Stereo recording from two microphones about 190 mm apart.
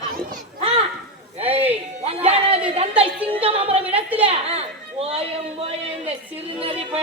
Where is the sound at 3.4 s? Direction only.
30° right (ahead or behind).